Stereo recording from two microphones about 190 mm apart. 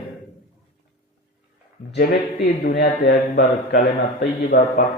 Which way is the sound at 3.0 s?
55° left (ahead or behind).